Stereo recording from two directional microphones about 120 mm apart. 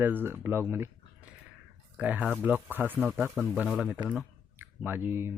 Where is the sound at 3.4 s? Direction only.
5° right (ahead or behind).